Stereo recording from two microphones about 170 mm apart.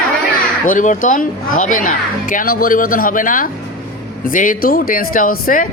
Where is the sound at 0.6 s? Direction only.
50° left (ahead or behind).